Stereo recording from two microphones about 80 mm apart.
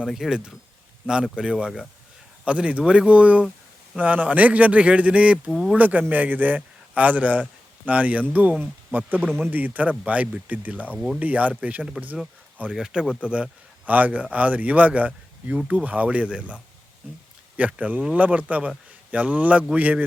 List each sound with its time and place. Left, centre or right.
0.0 s speech: centre
5.5 s speech: centre
5.7 s speech: right
12.7 s speech: centre
17.6 s speech: centre